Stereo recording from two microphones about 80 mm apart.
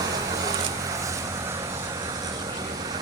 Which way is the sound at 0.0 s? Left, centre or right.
Right.